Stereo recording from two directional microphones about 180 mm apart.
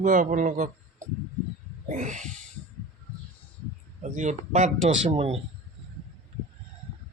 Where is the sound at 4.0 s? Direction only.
40° right (ahead or behind).